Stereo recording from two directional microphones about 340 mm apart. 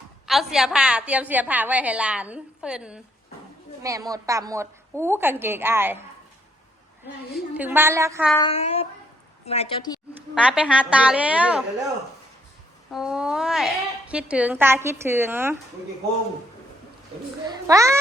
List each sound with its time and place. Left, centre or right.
0.3 s a woman's voice: centre
7.3 s a woman's voice: centre
8.4 s a sound: centre
10.3 s a woman's voice: centre
12.9 s a woman's voice: centre
17.7 s a woman's voice: centre